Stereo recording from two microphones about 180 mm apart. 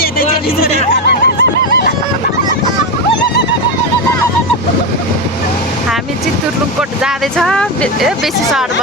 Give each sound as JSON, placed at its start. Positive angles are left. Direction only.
{"t": 0.0, "sound": "a sound", "side_deg": 55}
{"t": 1.0, "sound": "honk", "side_deg": 65}
{"t": 7.0, "sound": "speech", "side_deg": 0}